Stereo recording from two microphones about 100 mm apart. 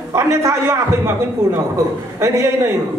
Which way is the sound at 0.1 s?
30° right (ahead or behind).